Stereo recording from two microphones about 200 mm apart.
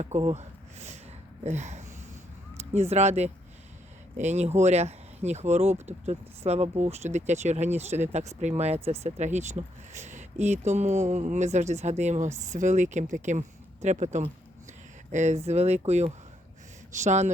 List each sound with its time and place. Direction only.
0.0 s speech: 30° right (ahead or behind)
1.5 s a sound: 35° right (ahead or behind)
2.9 s speech: 35° right (ahead or behind)